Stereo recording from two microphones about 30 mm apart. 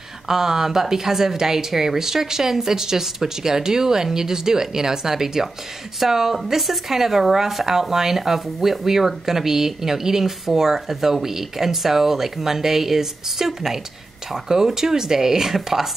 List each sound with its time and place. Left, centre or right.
0.3 s speech: centre